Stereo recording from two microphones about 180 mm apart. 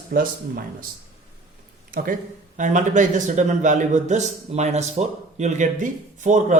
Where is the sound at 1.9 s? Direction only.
50° right (ahead or behind).